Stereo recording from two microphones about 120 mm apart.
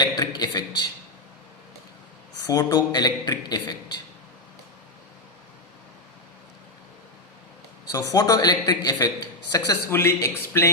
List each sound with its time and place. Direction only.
0.0 s a man's voice: 35° left (ahead or behind)
2.4 s a man's voice: 30° left (ahead or behind)
7.9 s a man's voice: 30° left (ahead or behind)
9.9 s a man's voice: 20° left (ahead or behind)